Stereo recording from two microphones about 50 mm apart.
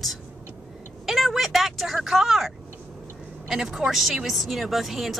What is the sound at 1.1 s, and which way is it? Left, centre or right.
Vehicle, centre.